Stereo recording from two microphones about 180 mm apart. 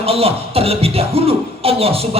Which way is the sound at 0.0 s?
35° right (ahead or behind).